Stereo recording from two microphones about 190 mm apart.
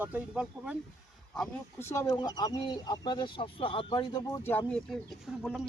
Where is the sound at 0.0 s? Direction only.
10° right (ahead or behind).